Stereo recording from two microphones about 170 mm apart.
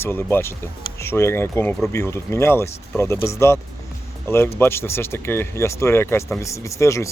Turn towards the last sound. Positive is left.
turn(degrees=15)  # may be behind; listen again after turning